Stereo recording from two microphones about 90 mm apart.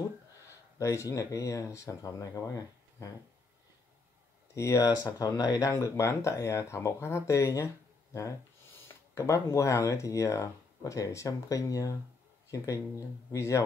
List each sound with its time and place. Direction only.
0.7 s speech: 35° left (ahead or behind)
4.6 s speech: 35° left (ahead or behind)